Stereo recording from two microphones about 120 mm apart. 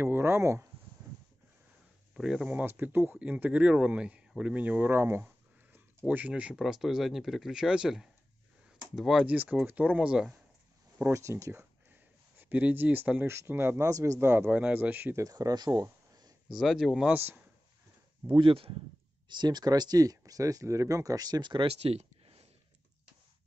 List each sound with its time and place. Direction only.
0.0 s speech: 20° right (ahead or behind)
2.1 s speech: 5° right (ahead or behind)
11.0 s speech: 20° right (ahead or behind)
15.2 s a sound: 35° right (ahead or behind)
16.5 s speech: centre (ahead or behind)
18.2 s speech: 50° right (ahead or behind)
19.2 s speech: 40° right (ahead or behind)
21.6 s a sound: 55° right (ahead or behind)